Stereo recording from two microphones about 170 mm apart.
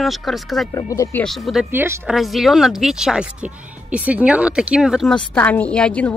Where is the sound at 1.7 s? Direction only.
15° right (ahead or behind).